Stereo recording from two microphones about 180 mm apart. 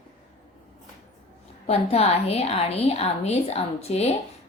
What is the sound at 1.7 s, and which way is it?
A woman's voice, 35° left (ahead or behind).